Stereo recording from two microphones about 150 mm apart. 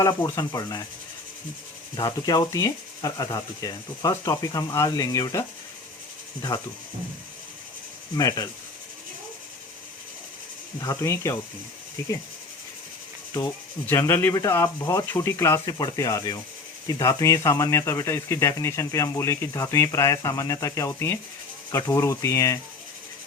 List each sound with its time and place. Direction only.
0.0 s speech: 25° left (ahead or behind)
2.0 s speech: 25° left (ahead or behind)
6.5 s speech: 20° left (ahead or behind)
8.1 s speech: 25° left (ahead or behind)
10.8 s speech: 20° left (ahead or behind)
13.8 s speech: 20° left (ahead or behind)